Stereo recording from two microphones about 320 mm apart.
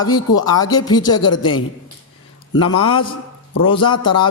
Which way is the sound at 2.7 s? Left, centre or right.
Centre.